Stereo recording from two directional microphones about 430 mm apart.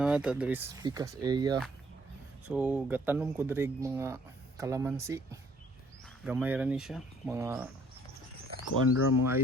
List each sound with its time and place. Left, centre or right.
0.0 s speech: centre
8.9 s speech: left